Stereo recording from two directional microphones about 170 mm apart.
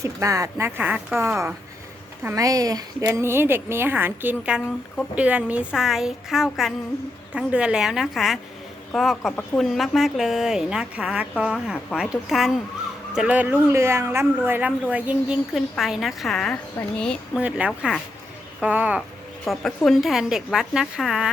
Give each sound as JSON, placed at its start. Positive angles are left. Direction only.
{"t": 0.0, "sound": "a woman's voice", "side_deg": -20}